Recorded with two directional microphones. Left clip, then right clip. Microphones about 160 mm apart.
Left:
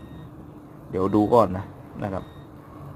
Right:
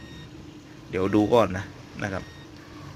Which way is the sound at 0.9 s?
Centre (ahead or behind).